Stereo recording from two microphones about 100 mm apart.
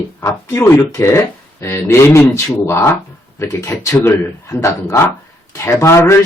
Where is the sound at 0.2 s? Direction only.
30° left (ahead or behind).